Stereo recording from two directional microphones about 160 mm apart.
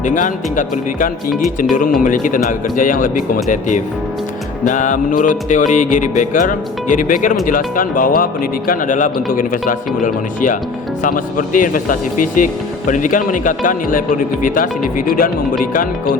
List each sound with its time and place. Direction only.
0.0 s music: 50° left (ahead or behind)
1.3 s speech: centre (ahead or behind)
2.0 s speech: 55° left (ahead or behind)
4.6 s music: 50° left (ahead or behind)
7.4 s speech: 60° left (ahead or behind)